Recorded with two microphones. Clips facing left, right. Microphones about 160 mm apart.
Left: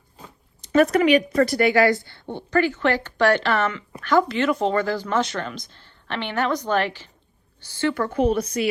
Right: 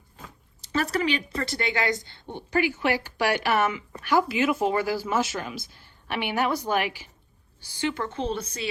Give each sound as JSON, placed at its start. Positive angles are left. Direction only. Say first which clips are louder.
{"t": 0.6, "sound": "a woman's voice", "louder": "left 9 dB", "side_deg": -30}
{"t": 8.4, "sound": "a woman's voice", "louder": "left 9 dB", "side_deg": -30}